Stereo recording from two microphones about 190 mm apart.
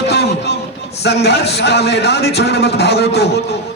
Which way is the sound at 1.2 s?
60° left (ahead or behind).